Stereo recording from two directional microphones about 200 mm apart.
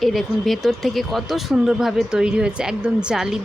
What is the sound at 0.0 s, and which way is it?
Speech, centre (ahead or behind).